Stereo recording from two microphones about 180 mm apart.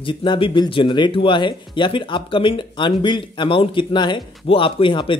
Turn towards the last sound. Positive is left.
turn(degrees=30)  # may be behind; listen again after turning